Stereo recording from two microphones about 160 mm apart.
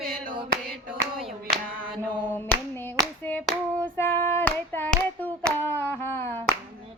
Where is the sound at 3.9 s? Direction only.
15° left (ahead or behind).